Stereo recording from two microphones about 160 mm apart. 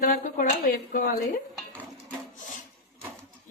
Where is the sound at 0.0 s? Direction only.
55° left (ahead or behind).